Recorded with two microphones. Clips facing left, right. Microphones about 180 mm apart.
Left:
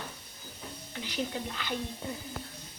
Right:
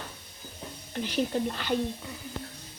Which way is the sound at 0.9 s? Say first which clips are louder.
Right 7 dB; 50° right (ahead or behind).